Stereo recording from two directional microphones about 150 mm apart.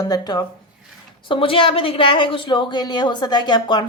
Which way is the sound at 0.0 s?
25° left (ahead or behind).